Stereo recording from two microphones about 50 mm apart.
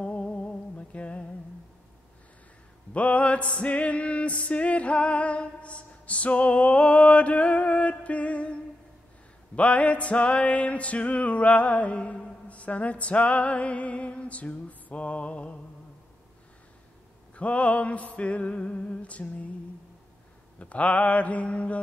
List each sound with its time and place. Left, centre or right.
0.0 s music: left
2.9 s music: left
9.6 s music: left
17.4 s music: left
20.5 s music: left